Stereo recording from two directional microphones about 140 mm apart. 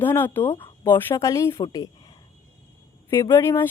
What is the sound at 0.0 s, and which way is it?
A woman's voice, 15° left (ahead or behind).